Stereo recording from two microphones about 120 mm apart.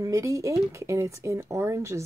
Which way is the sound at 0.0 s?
25° right (ahead or behind).